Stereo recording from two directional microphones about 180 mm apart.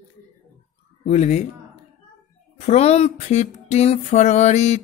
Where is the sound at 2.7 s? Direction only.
35° left (ahead or behind).